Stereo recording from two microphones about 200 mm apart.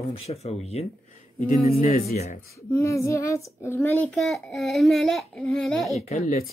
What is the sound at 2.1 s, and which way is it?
Speech, 35° left (ahead or behind).